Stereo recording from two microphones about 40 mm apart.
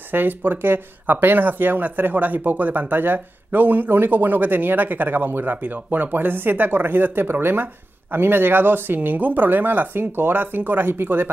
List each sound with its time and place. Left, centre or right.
0.1 s speech: right